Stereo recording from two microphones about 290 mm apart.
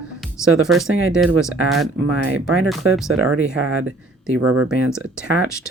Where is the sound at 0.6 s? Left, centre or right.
Centre.